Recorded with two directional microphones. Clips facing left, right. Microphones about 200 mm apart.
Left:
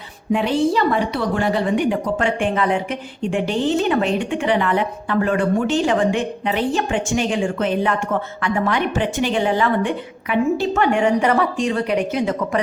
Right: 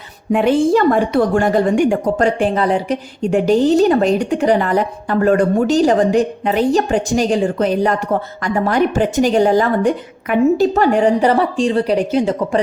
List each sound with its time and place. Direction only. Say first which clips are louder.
0.3 s a woman's voice: right 5 dB; 50° right (ahead or behind); by 12.5 s 30° right (ahead or behind)